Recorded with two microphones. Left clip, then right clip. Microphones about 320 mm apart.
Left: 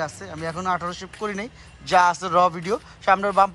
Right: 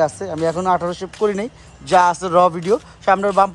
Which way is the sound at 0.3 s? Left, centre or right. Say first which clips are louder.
Right 8 dB; centre.